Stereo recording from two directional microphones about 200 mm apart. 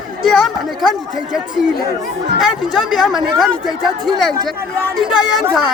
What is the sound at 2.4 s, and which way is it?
Speech, 5° right (ahead or behind).